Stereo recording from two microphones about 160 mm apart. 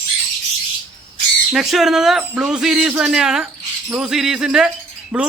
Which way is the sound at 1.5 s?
Centre (ahead or behind).